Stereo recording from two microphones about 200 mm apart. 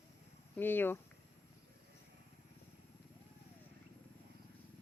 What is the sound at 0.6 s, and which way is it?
Speech, 10° left (ahead or behind).